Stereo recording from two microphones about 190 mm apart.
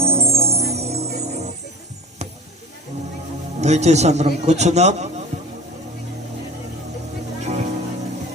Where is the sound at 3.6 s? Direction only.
35° right (ahead or behind).